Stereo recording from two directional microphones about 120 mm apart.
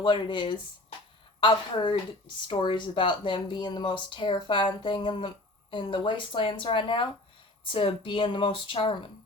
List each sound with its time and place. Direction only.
0.0 s speech: 40° left (ahead or behind)